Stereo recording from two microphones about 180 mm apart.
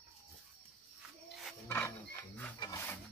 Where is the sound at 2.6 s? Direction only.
15° left (ahead or behind).